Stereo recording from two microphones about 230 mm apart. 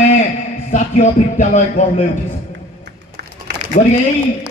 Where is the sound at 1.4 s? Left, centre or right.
Left.